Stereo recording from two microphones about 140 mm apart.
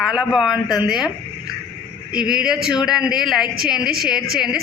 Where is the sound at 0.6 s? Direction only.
30° left (ahead or behind).